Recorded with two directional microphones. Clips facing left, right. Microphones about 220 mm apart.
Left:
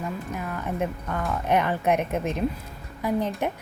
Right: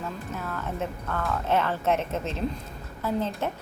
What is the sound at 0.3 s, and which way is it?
A woman's voice, 15° left (ahead or behind).